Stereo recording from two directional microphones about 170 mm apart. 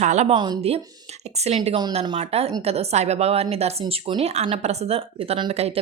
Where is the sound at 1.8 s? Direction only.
25° right (ahead or behind).